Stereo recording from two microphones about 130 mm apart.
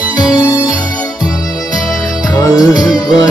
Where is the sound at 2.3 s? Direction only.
25° left (ahead or behind).